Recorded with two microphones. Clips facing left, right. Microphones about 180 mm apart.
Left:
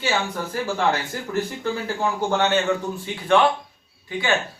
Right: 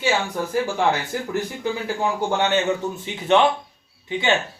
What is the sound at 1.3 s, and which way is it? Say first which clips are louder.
A man's voice: left 2 dB; 15° right (ahead or behind).